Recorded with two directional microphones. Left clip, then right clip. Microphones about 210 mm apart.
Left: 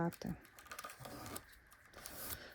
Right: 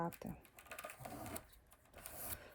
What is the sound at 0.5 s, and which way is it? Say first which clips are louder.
Patter: left 1 dB; 10° left (ahead or behind).